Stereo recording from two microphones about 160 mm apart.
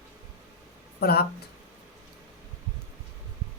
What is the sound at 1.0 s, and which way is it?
Speech, 80° left.